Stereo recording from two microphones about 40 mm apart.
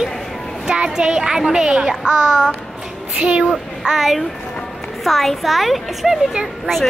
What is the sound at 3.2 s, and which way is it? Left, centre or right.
Speech, right.